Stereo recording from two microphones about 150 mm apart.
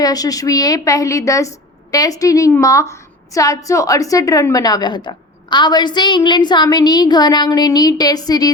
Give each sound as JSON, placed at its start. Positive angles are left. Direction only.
{"t": 0.0, "sound": "a woman's voice", "side_deg": 25}